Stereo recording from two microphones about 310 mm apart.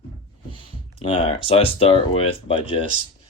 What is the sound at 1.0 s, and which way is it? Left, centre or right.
Speech, centre.